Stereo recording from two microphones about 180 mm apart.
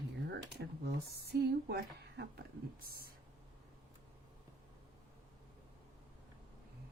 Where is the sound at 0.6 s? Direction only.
65° right (ahead or behind).